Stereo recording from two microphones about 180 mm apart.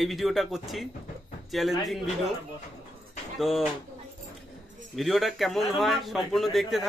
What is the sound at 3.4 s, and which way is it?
Speech, centre (ahead or behind).